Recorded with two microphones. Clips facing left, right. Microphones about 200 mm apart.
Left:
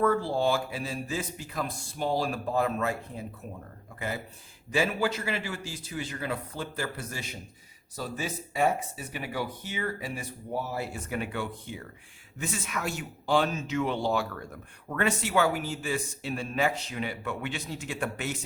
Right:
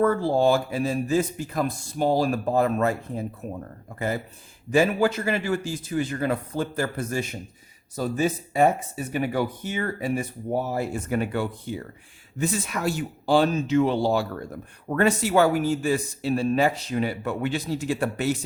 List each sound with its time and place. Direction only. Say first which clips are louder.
0.0 s speech: right 5 dB; 45° right (ahead or behind)
4.7 s speech: right 7 dB; 45° right (ahead or behind)